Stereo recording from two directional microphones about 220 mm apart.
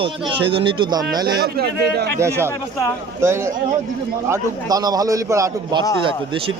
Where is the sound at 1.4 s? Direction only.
45° right (ahead or behind).